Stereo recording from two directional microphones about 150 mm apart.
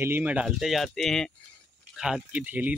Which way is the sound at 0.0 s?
10° right (ahead or behind).